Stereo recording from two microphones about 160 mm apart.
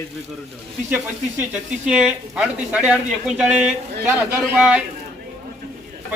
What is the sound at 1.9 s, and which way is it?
A man's voice, 5° right (ahead or behind).